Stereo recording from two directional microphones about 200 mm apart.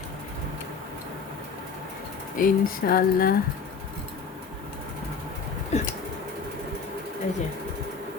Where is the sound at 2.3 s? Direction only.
45° left (ahead or behind).